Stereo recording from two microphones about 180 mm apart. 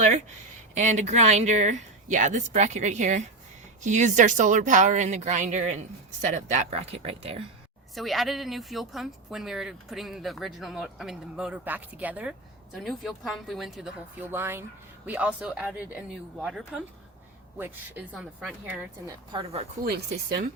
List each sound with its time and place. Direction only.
0.7 s speech: 40° right (ahead or behind)
7.9 s speech: centre (ahead or behind)
19.0 s speech: 25° right (ahead or behind)
19.8 s speech: 55° right (ahead or behind)